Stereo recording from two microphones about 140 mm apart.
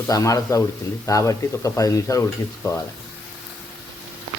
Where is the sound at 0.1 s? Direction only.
25° left (ahead or behind).